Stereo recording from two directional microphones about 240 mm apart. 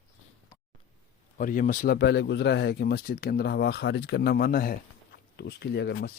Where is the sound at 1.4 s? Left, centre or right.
Left.